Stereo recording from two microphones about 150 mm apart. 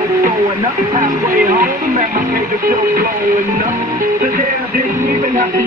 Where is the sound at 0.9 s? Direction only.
65° right (ahead or behind).